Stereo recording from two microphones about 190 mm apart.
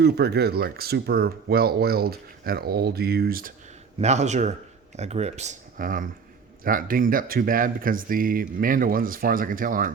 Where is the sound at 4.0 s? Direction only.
35° right (ahead or behind).